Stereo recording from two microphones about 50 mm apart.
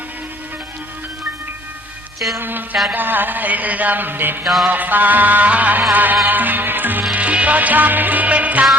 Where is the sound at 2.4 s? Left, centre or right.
Right.